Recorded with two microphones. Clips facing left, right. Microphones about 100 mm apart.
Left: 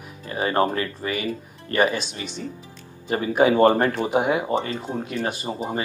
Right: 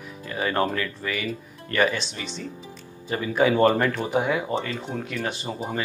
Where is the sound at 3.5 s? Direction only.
25° left (ahead or behind).